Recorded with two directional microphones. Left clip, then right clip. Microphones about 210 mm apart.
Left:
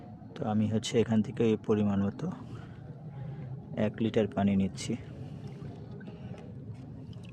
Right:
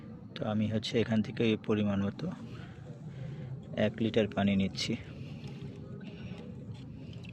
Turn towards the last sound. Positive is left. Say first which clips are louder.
# even
turn(degrees=15)  # may be behind; listen again after turning